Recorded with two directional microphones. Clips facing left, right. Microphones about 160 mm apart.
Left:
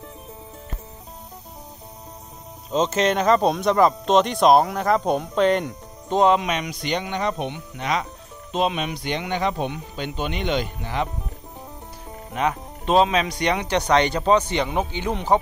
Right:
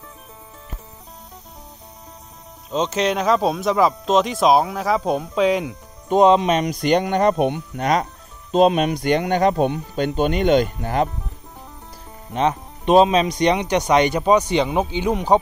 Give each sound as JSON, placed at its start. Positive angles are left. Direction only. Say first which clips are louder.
{"t": 2.7, "sound": "speech", "louder": "even", "side_deg": 0}
{"t": 6.0, "sound": "speech", "louder": "right 4 dB", "side_deg": -15}
{"t": 6.4, "sound": "speech", "louder": "right 7 dB", "side_deg": -40}
{"t": 12.4, "sound": "speech", "louder": "right 4 dB", "side_deg": -20}